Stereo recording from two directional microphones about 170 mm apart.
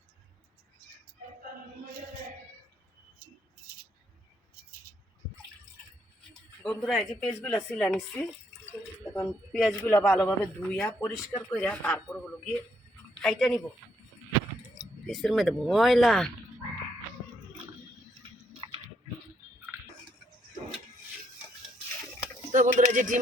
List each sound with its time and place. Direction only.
6.6 s speech: centre (ahead or behind)
15.0 s speech: centre (ahead or behind)
18.2 s chewing: 30° right (ahead or behind)
22.5 s speech: 45° right (ahead or behind)